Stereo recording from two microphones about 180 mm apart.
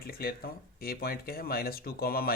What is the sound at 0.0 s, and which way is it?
Speech, 55° left (ahead or behind).